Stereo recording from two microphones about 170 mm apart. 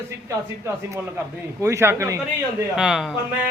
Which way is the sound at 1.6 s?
15° right (ahead or behind).